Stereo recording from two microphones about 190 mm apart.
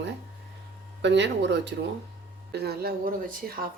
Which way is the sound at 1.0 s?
70° right (ahead or behind).